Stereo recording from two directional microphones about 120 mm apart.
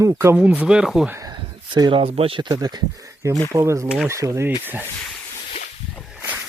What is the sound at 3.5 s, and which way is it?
Rub, 25° right (ahead or behind).